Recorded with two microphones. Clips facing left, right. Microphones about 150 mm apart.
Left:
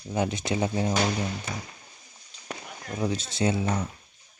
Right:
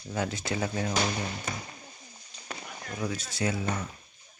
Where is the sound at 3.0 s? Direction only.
25° left (ahead or behind).